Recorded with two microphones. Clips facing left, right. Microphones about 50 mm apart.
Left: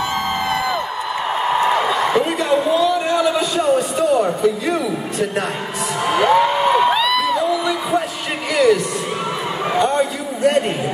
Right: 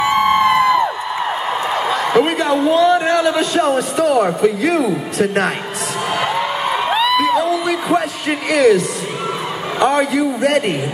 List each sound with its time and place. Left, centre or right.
0.0 s music: right
2.1 s a man's voice: right
4.0 s a man's voice: right
6.0 s a sound: centre
7.0 s music: centre
7.3 s heart murmur: right
8.5 s a woman's voice: right
9.8 s a sound: right